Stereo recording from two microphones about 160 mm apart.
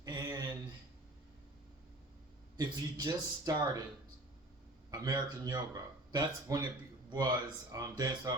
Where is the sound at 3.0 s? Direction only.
20° right (ahead or behind).